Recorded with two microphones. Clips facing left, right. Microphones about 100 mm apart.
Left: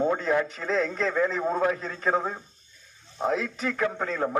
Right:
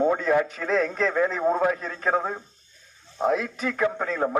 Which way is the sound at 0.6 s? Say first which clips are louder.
Right 3 dB; 60° right (ahead or behind).